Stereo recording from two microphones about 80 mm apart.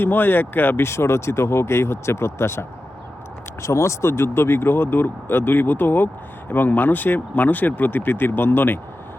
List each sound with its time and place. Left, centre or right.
0.0 s speech: left